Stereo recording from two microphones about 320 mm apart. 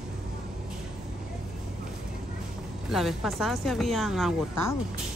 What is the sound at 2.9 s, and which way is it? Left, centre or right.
A woman's voice, centre.